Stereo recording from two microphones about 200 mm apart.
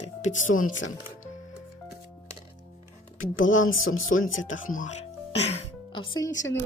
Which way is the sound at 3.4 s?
75° left (ahead or behind).